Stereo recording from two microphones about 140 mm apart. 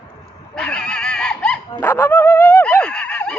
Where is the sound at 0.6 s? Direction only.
5° left (ahead or behind).